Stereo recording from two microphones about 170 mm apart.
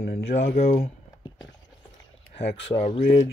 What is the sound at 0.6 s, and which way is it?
Speech, 40° left (ahead or behind).